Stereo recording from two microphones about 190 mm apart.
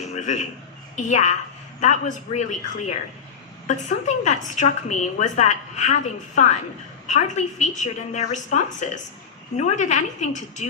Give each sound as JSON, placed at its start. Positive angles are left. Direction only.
{"t": 0.2, "sound": "a woman's voice", "side_deg": 40}